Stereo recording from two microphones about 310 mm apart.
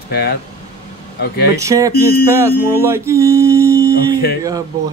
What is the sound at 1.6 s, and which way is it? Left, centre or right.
Music, centre.